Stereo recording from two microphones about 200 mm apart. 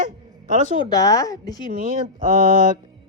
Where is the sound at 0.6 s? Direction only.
20° left (ahead or behind).